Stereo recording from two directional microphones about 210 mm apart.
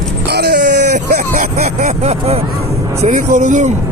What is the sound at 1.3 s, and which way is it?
Speech, 40° right (ahead or behind).